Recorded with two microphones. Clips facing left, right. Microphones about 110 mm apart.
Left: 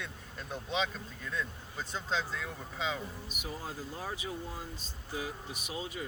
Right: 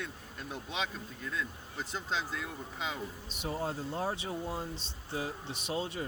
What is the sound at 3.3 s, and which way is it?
Speech, 30° right (ahead or behind).